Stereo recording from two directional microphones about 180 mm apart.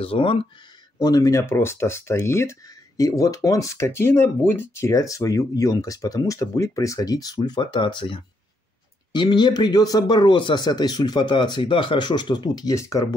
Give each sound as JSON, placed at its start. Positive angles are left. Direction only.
{"t": 0.0, "sound": "speech", "side_deg": 30}